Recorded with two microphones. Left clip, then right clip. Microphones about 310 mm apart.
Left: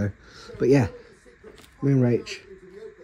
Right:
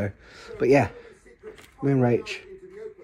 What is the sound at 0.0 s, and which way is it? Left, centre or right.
Speech, centre.